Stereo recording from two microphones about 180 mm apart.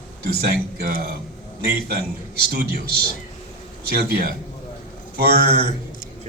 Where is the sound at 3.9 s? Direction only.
60° right (ahead or behind).